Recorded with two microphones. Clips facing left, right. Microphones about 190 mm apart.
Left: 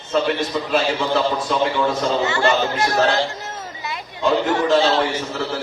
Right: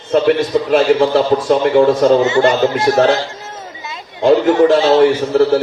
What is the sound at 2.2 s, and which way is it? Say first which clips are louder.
Speech: right 7 dB; 20° right (ahead or behind).